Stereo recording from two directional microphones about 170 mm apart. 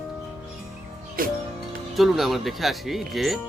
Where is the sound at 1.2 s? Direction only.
60° right (ahead or behind).